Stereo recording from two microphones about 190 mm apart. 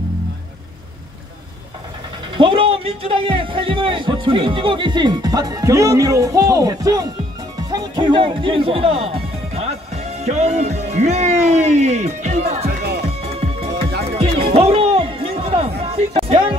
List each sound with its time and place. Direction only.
2.3 s speech: 25° right (ahead or behind)
12.6 s music: 60° right (ahead or behind)
13.0 s music: 30° right (ahead or behind)